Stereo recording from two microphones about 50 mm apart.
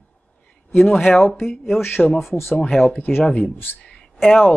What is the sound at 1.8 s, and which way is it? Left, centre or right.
Speech, left.